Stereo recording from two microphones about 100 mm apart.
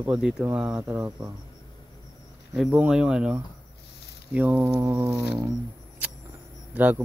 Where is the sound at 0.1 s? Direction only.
10° right (ahead or behind).